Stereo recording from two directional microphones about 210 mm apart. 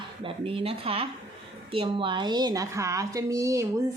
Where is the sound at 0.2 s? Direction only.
25° right (ahead or behind).